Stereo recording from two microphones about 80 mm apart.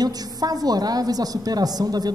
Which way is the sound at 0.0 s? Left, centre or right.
Right.